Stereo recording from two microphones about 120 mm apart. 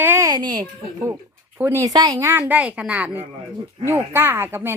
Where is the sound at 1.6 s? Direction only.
25° right (ahead or behind).